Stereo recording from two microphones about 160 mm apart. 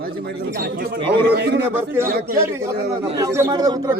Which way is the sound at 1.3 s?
90° right.